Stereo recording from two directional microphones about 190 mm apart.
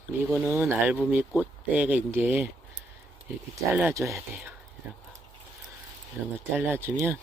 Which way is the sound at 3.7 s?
15° right (ahead or behind).